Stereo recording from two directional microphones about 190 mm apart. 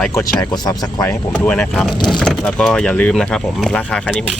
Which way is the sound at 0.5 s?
20° left (ahead or behind).